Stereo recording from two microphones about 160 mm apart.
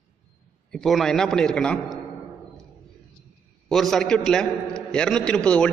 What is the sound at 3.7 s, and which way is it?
A man's voice, centre (ahead or behind).